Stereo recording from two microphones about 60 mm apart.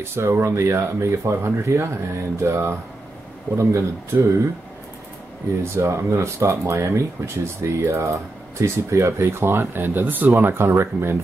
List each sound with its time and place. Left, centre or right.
0.0 s speech: right
5.6 s speech: right